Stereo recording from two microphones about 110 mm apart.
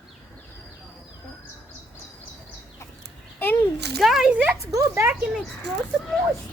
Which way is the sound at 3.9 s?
Centre (ahead or behind).